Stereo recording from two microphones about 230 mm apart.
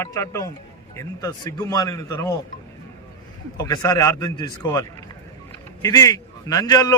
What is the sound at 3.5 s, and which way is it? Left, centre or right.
A man's voice, centre.